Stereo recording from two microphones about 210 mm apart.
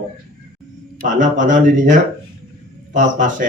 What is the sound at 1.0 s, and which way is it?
Speech, 40° right (ahead or behind).